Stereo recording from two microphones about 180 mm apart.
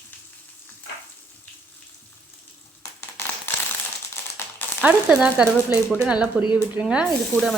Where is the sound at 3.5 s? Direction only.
10° left (ahead or behind).